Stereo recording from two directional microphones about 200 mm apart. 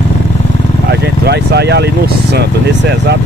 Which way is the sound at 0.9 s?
55° right (ahead or behind).